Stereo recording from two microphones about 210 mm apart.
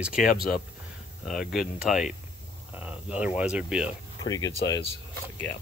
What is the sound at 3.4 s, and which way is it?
Speech, 5° right (ahead or behind).